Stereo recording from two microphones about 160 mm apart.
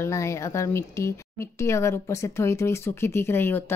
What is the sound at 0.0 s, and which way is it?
Speech, 20° left (ahead or behind).